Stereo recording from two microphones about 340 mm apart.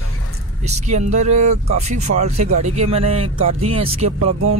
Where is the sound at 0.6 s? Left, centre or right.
Centre.